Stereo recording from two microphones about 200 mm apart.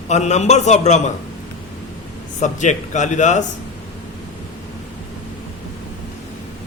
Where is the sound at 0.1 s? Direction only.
35° left (ahead or behind).